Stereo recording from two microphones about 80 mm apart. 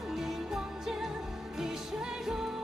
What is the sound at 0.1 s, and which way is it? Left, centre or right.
Music, centre.